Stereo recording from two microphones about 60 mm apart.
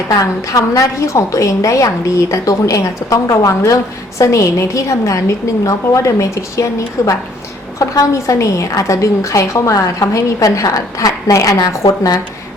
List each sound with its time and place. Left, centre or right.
0.1 s a woman's voice: left